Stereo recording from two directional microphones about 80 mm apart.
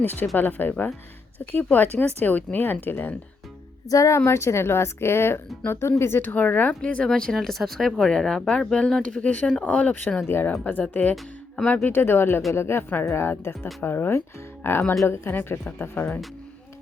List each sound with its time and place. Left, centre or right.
0.3 s speech: left
3.8 s speech: left; by 11.1 s centre
11.1 s speech: centre
11.9 s speech: left